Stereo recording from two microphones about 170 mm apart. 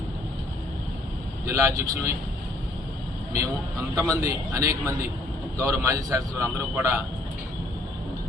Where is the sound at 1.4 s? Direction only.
15° right (ahead or behind).